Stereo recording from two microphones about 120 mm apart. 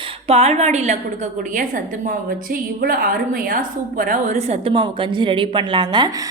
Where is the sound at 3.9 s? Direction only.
80° right; by 4.7 s 60° right (ahead or behind).